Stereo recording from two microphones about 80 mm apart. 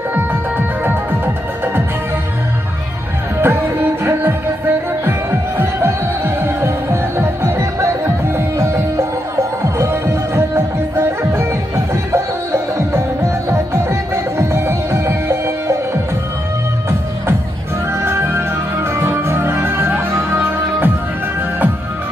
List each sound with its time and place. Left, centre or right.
0.1 s music: right
3.3 s music: right
18.0 s music: right